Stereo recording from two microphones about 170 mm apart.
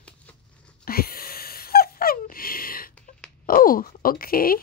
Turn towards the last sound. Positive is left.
turn(degrees=60)  # may be behind; listen again after turning